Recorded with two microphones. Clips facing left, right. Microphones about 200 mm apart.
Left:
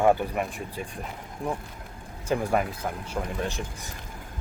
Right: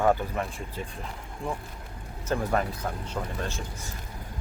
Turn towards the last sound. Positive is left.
turn(degrees=15)  # may be behind; listen again after turning